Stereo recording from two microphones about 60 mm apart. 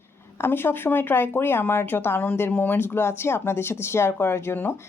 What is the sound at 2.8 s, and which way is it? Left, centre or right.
Speech, left.